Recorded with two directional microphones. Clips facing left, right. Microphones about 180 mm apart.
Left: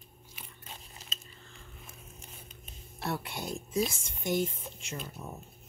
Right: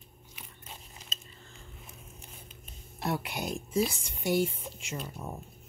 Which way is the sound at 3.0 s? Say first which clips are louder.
Right 3 dB; 15° right (ahead or behind).